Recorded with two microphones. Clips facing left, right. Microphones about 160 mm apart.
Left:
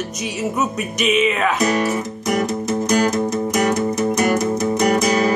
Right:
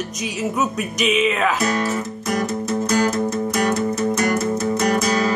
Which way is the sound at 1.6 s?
15° left (ahead or behind).